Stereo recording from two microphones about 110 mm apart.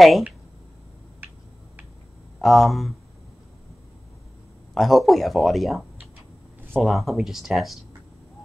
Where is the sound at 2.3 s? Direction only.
Centre (ahead or behind).